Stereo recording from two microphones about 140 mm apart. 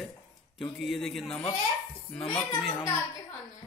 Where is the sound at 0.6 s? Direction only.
Centre (ahead or behind).